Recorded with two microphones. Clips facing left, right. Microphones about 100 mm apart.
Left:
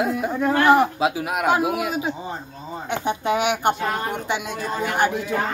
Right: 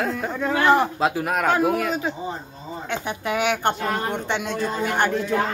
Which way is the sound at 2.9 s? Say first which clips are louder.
Left 4 dB; 25° left (ahead or behind).